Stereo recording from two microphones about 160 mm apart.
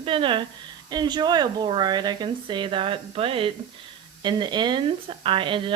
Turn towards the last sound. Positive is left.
turn(degrees=-30)  # may be behind; listen again after turning